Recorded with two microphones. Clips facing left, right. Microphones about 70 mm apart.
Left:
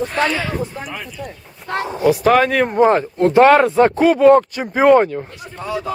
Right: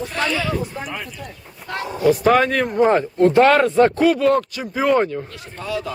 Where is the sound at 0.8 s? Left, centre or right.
Centre.